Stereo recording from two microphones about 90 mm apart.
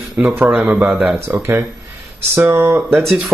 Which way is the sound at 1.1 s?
25° right (ahead or behind).